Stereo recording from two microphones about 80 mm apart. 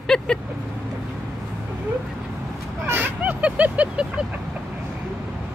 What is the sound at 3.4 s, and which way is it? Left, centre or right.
Vehicle, centre.